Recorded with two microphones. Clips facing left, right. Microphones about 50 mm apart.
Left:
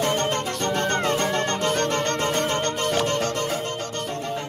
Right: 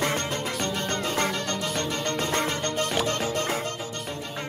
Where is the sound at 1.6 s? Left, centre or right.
Left.